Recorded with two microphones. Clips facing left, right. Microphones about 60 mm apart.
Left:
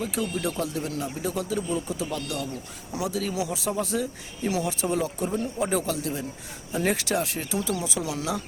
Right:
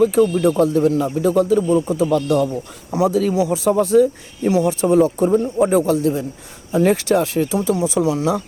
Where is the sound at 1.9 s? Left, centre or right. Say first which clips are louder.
Right 14 dB; right.